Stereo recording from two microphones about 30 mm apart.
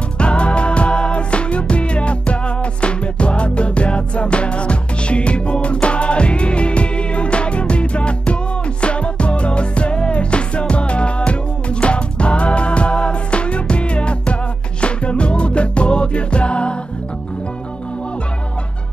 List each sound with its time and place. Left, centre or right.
0.2 s music: left